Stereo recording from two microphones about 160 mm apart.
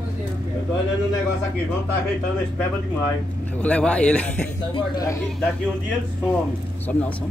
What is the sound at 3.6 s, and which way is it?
Speech, 10° left (ahead or behind).